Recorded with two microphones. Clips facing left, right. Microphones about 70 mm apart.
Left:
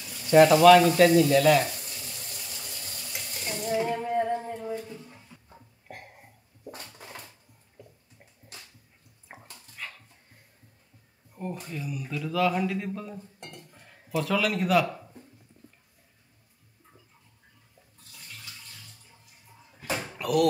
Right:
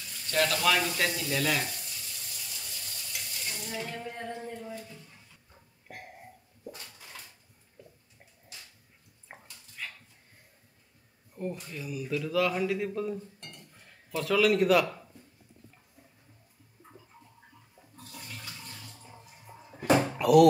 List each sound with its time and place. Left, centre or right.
0.0 s frying: centre
0.7 s speech: centre
1.8 s water tap: left
3.6 s a sound: left
6.7 s a sound: left
9.3 s dog: centre
11.3 s speech: centre
13.4 s dishes: centre
19.8 s a sound: right
20.2 s door: centre